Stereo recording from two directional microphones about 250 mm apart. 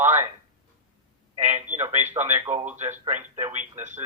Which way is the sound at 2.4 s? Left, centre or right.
Right.